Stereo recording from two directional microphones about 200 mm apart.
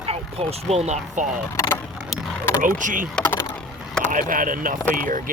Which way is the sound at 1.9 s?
Centre (ahead or behind).